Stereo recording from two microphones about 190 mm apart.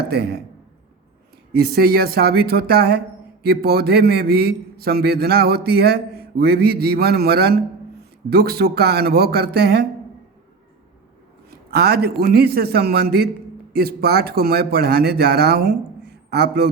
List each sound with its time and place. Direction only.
0.1 s a man's voice: 55° right (ahead or behind)
1.5 s a man's voice: 50° right (ahead or behind)
11.7 s a man's voice: 55° right (ahead or behind)